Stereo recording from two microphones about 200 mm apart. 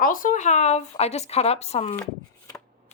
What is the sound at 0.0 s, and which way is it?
Speech, 45° left (ahead or behind).